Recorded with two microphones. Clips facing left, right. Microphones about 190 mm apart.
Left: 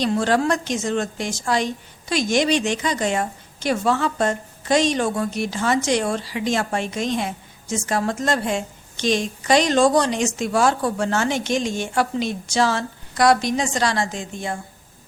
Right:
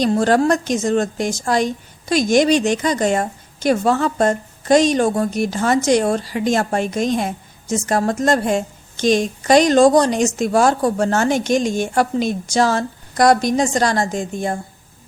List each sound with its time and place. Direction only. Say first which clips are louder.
0.0 s a woman's voice: right 4 dB; 45° right (ahead or behind)